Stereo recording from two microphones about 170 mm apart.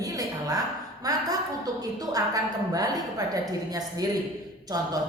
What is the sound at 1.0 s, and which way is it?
A woman's voice, 20° right (ahead or behind).